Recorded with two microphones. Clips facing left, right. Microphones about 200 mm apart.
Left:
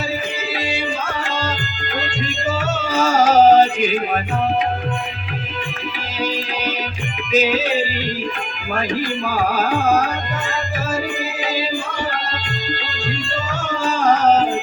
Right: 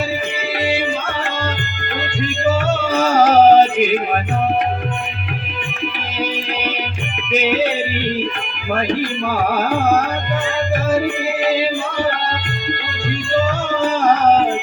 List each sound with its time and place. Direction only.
2.9 s music: 60° right (ahead or behind)
3.8 s speech: 60° right (ahead or behind)
7.4 s music: 60° right (ahead or behind)
9.0 s music: 60° right (ahead or behind)
11.4 s music: 65° right (ahead or behind)
13.8 s music: 60° right (ahead or behind)